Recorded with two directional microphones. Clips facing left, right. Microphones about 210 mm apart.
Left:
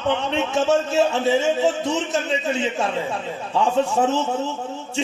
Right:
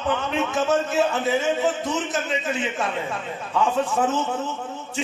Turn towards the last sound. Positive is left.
turn(degrees=25)  # may be behind; listen again after turning